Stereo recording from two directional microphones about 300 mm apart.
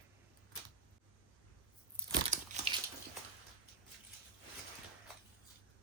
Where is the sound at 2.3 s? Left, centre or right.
Right.